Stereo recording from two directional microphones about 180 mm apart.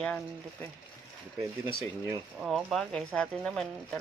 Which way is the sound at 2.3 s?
Centre (ahead or behind).